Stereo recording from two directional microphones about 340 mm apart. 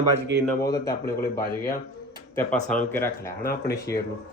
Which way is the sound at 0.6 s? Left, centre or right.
Centre.